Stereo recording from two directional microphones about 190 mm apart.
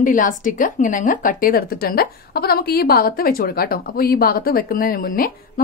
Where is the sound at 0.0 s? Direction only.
45° left (ahead or behind).